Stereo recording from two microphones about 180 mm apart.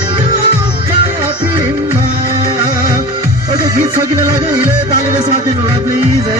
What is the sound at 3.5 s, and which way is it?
Music, 20° right (ahead or behind).